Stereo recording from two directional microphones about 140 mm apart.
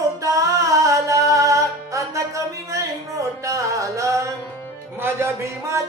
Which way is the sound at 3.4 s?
20° right (ahead or behind).